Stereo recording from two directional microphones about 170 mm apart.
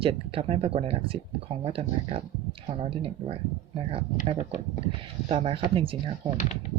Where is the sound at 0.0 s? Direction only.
35° right (ahead or behind).